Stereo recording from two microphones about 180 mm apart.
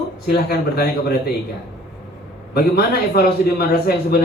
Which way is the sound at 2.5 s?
60° left (ahead or behind).